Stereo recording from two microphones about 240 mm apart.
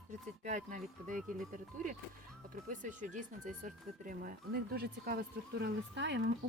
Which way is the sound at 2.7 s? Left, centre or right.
Right.